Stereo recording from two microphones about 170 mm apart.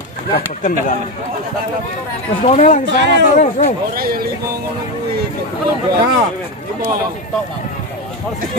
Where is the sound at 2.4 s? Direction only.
40° left (ahead or behind).